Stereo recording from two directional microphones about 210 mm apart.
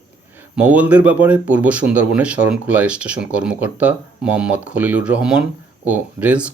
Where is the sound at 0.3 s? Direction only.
5° right (ahead or behind).